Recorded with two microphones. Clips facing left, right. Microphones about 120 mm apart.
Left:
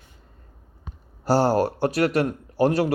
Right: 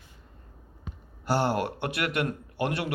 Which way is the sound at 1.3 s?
35° left (ahead or behind).